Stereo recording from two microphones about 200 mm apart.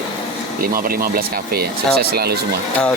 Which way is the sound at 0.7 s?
45° right (ahead or behind).